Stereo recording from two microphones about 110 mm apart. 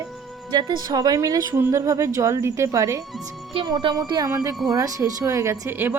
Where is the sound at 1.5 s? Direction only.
25° right (ahead or behind).